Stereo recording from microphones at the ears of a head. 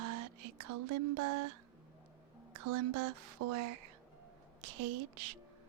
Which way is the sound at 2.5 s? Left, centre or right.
Right.